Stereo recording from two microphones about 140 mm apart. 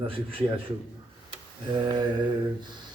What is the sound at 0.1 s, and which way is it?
Speech, 40° right (ahead or behind).